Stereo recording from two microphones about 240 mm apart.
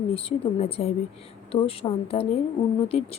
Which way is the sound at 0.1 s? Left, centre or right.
Left.